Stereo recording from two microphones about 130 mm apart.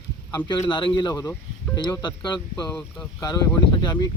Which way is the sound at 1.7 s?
35° left (ahead or behind).